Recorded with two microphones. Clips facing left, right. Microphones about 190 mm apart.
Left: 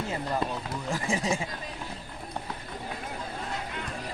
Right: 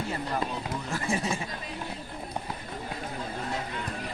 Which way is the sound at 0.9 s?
15° left (ahead or behind).